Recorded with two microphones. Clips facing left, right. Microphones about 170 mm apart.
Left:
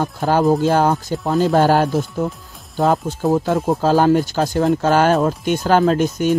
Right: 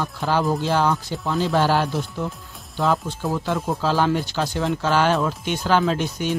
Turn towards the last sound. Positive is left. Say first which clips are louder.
# left 7 dB
turn(degrees=45)  # may be behind; listen again after turning